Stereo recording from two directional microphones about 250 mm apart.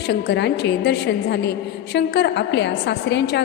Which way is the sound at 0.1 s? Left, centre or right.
Left.